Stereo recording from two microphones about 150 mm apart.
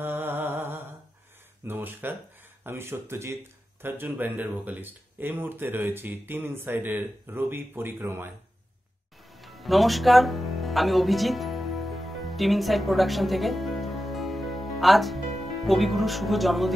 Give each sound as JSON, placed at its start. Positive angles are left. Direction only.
{"t": 0.0, "sound": "a sound", "side_deg": -15}
{"t": 1.7, "sound": "speech", "side_deg": -15}
{"t": 9.3, "sound": "music", "side_deg": 0}
{"t": 15.6, "sound": "speech", "side_deg": 0}